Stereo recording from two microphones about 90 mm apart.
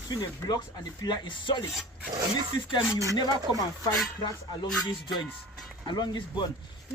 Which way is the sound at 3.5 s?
35° left (ahead or behind).